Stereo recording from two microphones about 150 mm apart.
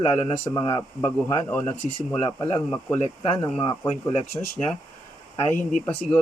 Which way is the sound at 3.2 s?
30° left (ahead or behind).